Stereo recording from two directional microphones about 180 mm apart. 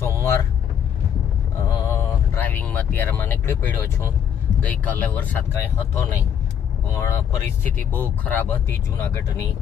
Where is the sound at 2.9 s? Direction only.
10° left (ahead or behind).